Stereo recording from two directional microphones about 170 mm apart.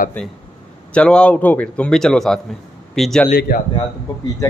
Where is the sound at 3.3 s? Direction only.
60° left (ahead or behind).